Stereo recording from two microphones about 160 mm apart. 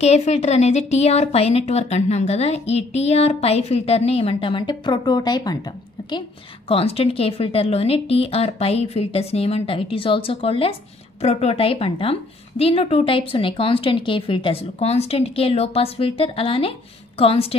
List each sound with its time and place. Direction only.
0.0 s speech: 40° left (ahead or behind); by 5.6 s 25° left (ahead or behind)
6.7 s speech: 35° left (ahead or behind)